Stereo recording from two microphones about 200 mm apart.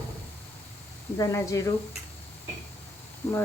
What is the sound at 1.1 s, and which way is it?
Speech, 15° left (ahead or behind).